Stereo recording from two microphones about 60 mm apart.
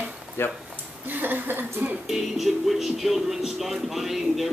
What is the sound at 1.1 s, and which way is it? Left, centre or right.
Speech, right.